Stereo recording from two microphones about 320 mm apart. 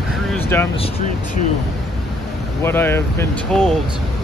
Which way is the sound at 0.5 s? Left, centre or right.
Centre.